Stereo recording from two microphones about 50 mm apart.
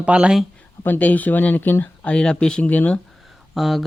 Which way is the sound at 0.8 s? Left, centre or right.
Left.